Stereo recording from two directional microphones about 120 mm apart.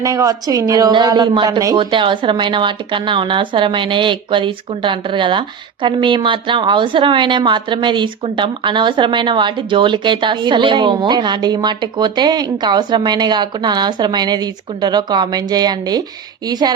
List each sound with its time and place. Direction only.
0.0 s a woman's voice: 30° right (ahead or behind)
1.8 s a woman's voice: 45° right (ahead or behind)